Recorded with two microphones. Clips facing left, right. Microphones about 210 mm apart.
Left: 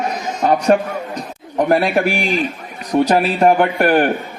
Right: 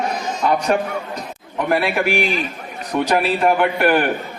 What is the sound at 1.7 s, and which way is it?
Speech, 40° left (ahead or behind).